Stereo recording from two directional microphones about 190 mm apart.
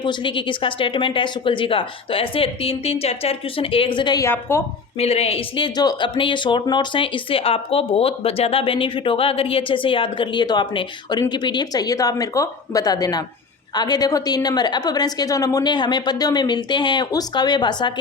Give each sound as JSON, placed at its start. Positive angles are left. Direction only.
{"t": 0.0, "sound": "speech", "side_deg": 25}
{"t": 4.9, "sound": "speech", "side_deg": 35}